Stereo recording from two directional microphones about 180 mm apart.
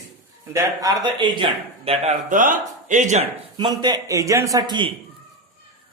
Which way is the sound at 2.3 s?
45° right (ahead or behind).